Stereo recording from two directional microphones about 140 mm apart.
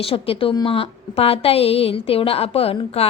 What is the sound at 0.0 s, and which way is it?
A woman's voice, 45° left (ahead or behind).